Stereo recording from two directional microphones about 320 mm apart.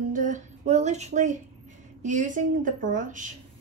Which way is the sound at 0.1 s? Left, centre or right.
Right.